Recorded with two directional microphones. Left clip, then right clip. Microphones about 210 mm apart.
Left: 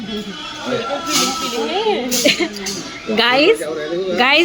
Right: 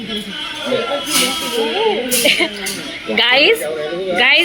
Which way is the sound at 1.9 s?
15° left (ahead or behind).